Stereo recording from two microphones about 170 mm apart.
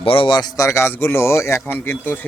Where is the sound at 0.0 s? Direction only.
30° left (ahead or behind).